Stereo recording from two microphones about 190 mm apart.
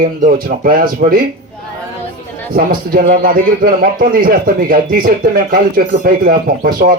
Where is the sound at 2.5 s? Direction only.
50° right (ahead or behind).